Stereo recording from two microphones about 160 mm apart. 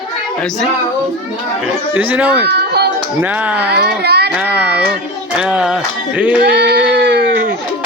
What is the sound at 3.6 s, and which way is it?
Speech, 90° right.